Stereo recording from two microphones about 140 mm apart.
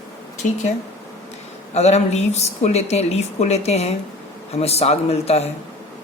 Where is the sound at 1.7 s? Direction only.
50° left (ahead or behind).